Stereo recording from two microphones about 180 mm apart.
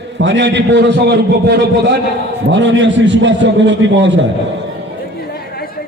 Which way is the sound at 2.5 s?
90° right.